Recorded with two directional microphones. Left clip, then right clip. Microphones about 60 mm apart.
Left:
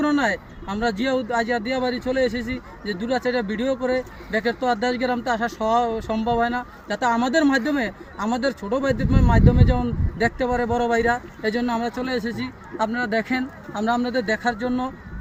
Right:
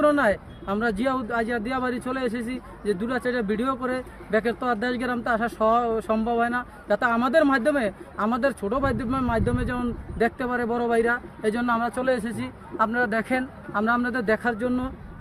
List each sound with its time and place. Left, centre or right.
0.0 s speech: right
1.3 s speech: right
14.4 s speech: right